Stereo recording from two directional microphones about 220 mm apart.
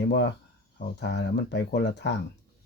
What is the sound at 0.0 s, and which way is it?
Speech, 50° left (ahead or behind).